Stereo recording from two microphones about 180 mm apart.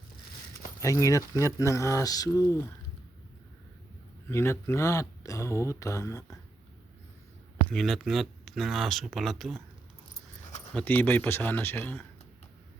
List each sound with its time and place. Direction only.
0.8 s speech: 15° left (ahead or behind)
4.3 s speech: 15° left (ahead or behind)
7.7 s speech: centre (ahead or behind)
10.8 s speech: 10° left (ahead or behind)